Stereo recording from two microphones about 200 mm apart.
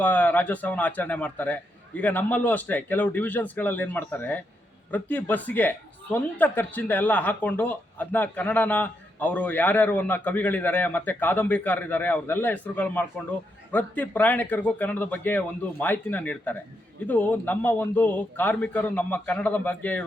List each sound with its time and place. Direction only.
0.0 s speech: 5° left (ahead or behind)